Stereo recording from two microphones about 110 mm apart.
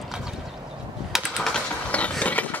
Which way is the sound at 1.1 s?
5° left (ahead or behind).